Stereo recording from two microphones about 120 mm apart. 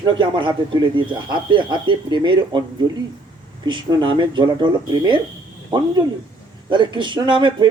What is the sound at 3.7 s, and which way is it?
A man's voice, 40° right (ahead or behind).